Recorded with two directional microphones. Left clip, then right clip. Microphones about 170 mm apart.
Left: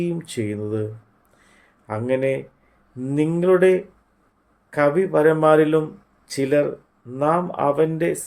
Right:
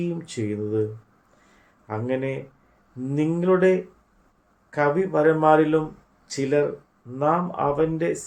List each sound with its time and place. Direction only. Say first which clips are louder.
0.0 s speech: left 3 dB; 55° left (ahead or behind)
1.9 s speech: left 5 dB; 55° left (ahead or behind)